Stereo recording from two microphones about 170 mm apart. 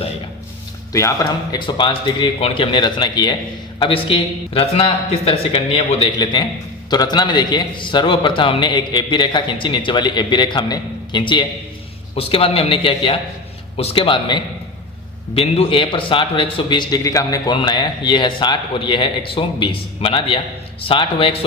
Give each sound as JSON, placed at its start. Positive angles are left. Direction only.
{"t": 0.9, "sound": "a man's voice", "side_deg": 20}